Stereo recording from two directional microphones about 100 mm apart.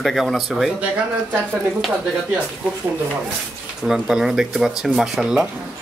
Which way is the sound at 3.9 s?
5° right (ahead or behind).